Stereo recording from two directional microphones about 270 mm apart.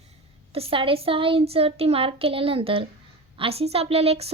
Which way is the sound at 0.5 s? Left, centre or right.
Right.